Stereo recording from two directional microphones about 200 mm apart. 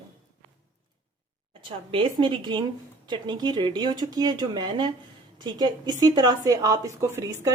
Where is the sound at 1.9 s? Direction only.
25° right (ahead or behind).